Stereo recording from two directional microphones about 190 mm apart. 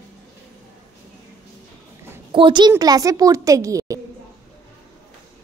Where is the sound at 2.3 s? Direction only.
25° right (ahead or behind).